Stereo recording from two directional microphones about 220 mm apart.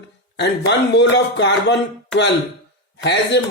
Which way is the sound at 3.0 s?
50° left (ahead or behind).